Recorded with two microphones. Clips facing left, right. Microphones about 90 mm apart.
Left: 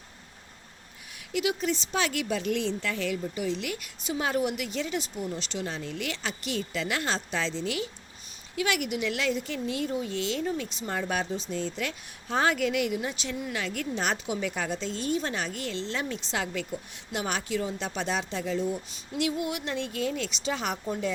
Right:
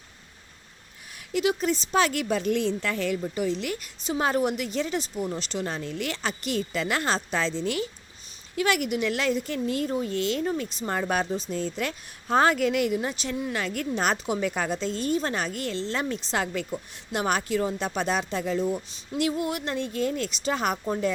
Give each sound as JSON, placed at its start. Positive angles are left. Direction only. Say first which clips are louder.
{"t": 1.3, "sound": "a woman's voice", "louder": "right 3 dB", "side_deg": -40}